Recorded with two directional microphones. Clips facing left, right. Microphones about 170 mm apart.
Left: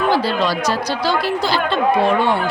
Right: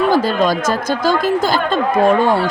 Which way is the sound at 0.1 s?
45° right (ahead or behind).